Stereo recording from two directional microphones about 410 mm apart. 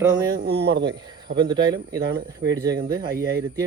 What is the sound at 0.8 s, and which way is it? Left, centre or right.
Speech, centre.